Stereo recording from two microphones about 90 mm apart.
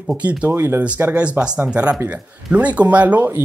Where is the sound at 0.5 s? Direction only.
30° right (ahead or behind).